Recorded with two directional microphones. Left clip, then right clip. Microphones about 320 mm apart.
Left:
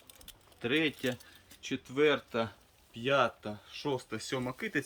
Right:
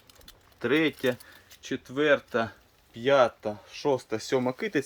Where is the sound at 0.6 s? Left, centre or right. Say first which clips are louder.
Right 6 dB; centre.